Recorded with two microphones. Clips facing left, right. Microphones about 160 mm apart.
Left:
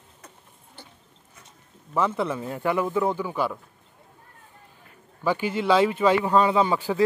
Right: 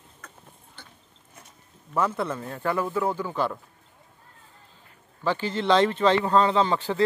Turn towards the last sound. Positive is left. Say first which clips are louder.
# left 1 dB
turn(degrees=10)  # may be behind; listen again after turning